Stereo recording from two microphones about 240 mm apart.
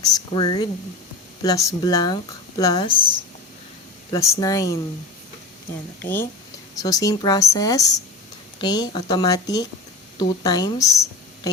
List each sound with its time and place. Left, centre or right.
0.0 s a sound: centre
1.4 s a woman's voice: centre
4.1 s a woman's voice: centre
6.0 s a woman's voice: centre